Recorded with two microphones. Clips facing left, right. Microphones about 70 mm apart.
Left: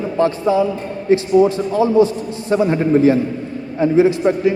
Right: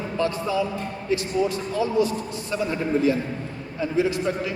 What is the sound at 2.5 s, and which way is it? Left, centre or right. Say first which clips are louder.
A man's voice: left 10 dB; left.